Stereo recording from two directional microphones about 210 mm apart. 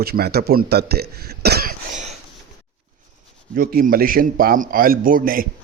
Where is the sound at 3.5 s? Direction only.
45° right (ahead or behind).